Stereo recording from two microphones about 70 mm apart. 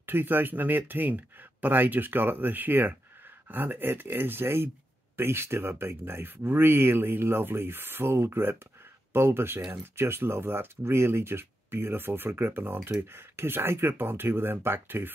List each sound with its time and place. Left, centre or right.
0.0 s speech: right